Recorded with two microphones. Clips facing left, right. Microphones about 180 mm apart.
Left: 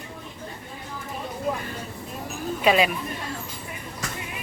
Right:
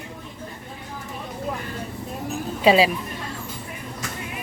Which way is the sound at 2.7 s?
30° right (ahead or behind).